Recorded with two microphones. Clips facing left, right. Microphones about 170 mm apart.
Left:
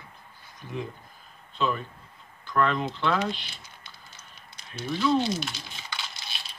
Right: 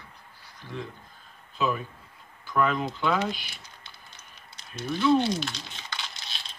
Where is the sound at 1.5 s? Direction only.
5° right (ahead or behind).